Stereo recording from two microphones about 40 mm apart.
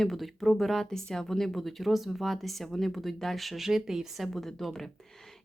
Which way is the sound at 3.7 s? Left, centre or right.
Centre.